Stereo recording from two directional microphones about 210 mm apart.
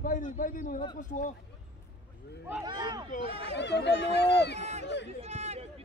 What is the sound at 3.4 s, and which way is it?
Speech, 55° left (ahead or behind).